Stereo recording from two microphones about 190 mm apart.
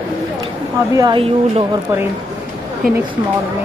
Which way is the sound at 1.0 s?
25° right (ahead or behind).